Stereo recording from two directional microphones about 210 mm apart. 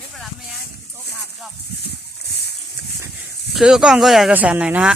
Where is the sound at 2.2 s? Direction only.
50° left (ahead or behind).